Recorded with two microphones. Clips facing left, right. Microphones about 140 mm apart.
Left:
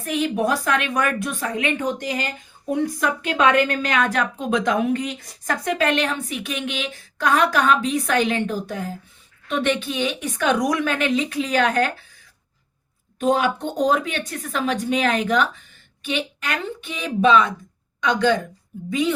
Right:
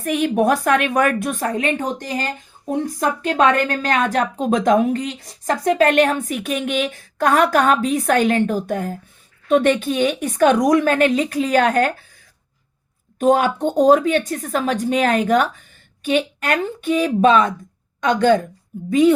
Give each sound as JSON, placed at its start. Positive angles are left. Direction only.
{"t": 0.0, "sound": "a woman's voice", "side_deg": -55}
{"t": 13.1, "sound": "a woman's voice", "side_deg": -45}